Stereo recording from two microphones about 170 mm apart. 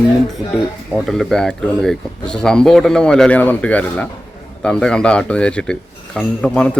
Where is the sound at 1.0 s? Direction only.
Centre (ahead or behind).